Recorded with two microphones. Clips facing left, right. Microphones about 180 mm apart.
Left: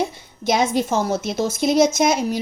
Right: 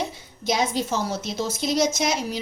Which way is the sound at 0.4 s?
55° left (ahead or behind).